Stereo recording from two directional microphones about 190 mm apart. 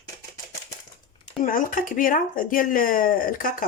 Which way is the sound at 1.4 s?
45° left (ahead or behind).